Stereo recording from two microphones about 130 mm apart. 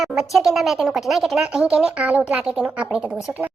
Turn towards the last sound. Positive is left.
turn(degrees=-5)  # may be behind; listen again after turning